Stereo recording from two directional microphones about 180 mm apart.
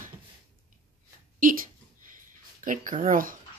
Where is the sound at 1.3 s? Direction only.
50° right (ahead or behind).